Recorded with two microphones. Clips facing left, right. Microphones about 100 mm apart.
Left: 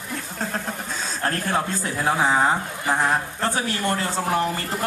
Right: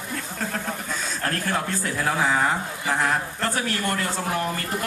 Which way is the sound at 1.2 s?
30° left (ahead or behind).